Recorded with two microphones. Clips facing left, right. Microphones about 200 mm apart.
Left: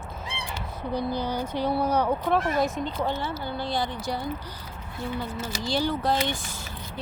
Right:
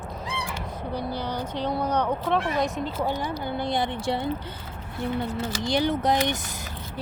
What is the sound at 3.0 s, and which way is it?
Speech, 15° right (ahead or behind).